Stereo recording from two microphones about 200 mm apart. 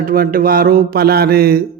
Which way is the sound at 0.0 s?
45° right (ahead or behind).